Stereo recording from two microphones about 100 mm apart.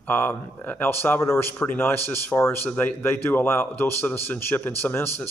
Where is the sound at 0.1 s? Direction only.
20° left (ahead or behind).